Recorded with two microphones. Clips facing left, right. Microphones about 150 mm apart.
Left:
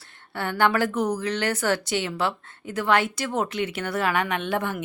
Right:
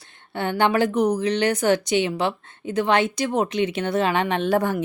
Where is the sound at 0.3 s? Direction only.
20° right (ahead or behind).